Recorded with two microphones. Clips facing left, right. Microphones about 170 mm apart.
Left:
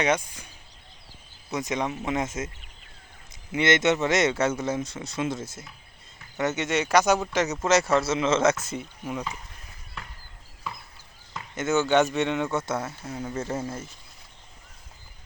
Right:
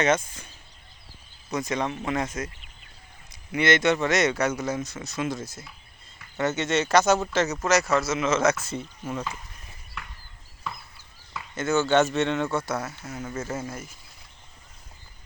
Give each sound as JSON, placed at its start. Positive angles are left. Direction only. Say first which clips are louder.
{"t": 0.0, "sound": "speech", "louder": "right 2 dB", "side_deg": 15}
{"t": 1.5, "sound": "speech", "louder": "right 1 dB", "side_deg": 20}
{"t": 3.5, "sound": "speech", "louder": "even", "side_deg": 20}
{"t": 11.5, "sound": "speech", "louder": "even", "side_deg": 20}